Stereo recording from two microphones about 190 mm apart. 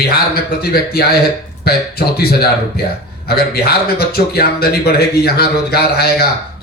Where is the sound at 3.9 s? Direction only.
55° left (ahead or behind).